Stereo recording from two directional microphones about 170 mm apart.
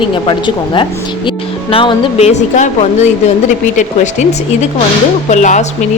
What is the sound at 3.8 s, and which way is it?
Speech, 45° left (ahead or behind).